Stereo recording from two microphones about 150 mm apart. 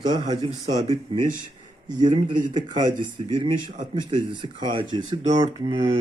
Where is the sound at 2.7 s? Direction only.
30° right (ahead or behind).